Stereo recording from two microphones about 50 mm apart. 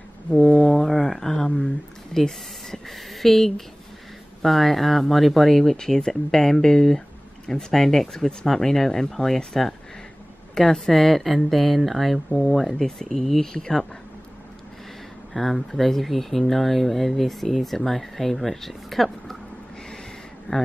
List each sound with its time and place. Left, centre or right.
0.3 s a sound: centre
4.4 s speech: centre
15.3 s speech: centre
20.5 s speech: left